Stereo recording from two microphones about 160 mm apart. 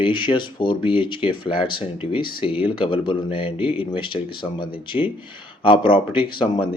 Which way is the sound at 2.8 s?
35° left (ahead or behind).